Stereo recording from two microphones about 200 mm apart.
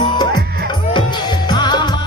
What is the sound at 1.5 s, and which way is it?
Music, 20° left (ahead or behind).